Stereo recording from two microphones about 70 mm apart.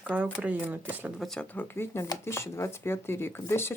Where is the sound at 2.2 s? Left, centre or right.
Left.